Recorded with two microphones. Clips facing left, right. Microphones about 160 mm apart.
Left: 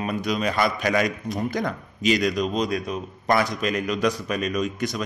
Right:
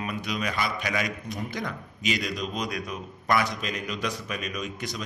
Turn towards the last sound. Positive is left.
turn(degrees=50)  # may be behind; listen again after turning